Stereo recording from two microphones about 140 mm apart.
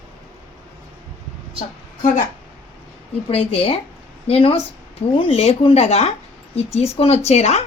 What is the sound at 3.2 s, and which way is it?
A woman's voice, 45° left (ahead or behind).